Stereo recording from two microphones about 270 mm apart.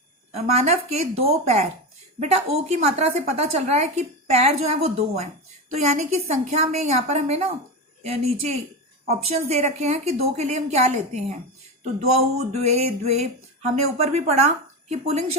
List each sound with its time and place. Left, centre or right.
0.3 s speech: right